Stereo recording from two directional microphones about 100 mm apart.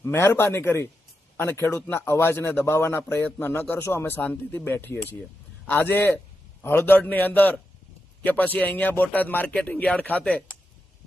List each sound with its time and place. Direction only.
0.0 s a man's voice: 25° left (ahead or behind)